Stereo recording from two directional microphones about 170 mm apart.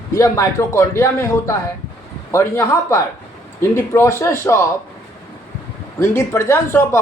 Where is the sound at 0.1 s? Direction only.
15° left (ahead or behind).